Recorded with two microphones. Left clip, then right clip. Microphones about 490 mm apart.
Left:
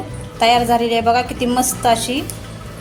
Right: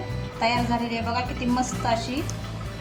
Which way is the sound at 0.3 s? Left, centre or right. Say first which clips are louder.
Left 11 dB; centre.